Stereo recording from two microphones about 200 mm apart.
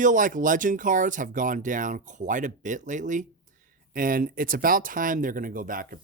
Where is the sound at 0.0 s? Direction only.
40° right (ahead or behind).